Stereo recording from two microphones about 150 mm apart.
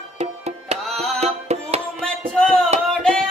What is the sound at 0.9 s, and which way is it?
Music, centre (ahead or behind).